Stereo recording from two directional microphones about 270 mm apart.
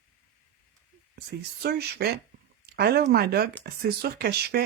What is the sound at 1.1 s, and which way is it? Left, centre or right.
Speech, right.